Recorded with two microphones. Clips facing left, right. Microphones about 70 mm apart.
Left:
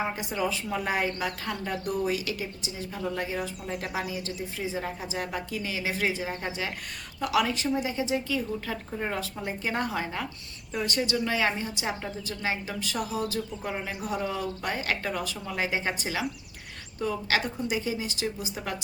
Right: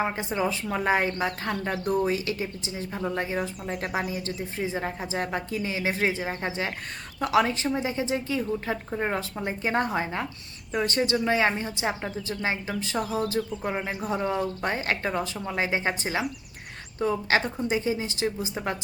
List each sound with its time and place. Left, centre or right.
0.0 s a woman's voice: right